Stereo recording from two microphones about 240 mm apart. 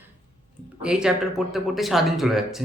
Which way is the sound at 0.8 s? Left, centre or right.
Centre.